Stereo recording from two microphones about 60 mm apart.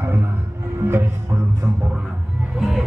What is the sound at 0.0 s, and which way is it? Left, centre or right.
Music, right.